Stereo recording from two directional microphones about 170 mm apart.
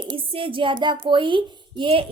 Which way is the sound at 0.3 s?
30° right (ahead or behind).